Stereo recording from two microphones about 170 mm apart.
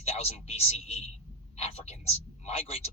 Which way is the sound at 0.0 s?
35° left (ahead or behind).